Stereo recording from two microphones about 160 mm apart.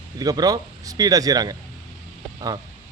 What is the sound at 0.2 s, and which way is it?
Speech, 25° right (ahead or behind).